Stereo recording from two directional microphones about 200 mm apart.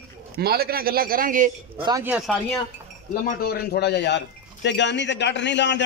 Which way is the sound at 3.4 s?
55° left (ahead or behind).